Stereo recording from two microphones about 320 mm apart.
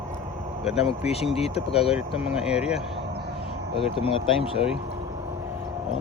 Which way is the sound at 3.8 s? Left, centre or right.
Centre.